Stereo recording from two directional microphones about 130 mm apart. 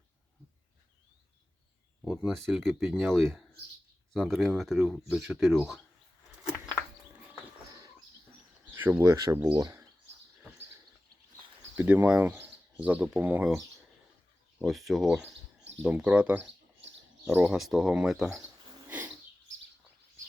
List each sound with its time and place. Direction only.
2.0 s speech: centre (ahead or behind)
8.6 s speech: 15° right (ahead or behind)
11.8 s speech: 15° right (ahead or behind)
14.6 s speech: centre (ahead or behind)
17.6 s speech: 5° right (ahead or behind)
18.9 s bird: 15° right (ahead or behind)